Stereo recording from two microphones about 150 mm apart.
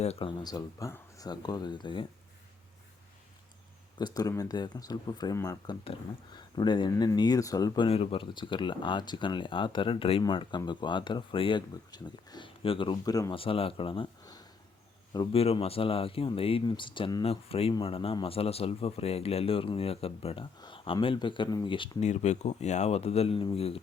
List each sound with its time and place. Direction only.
0.0 s speech: 40° left (ahead or behind)
3.9 s speech: 25° left (ahead or behind)
7.9 s speech: 40° left (ahead or behind); by 13.3 s 25° left (ahead or behind)
13.3 s speech: 35° left (ahead or behind)
17.2 s speech: 40° left (ahead or behind)
22.0 s speech: 50° left (ahead or behind)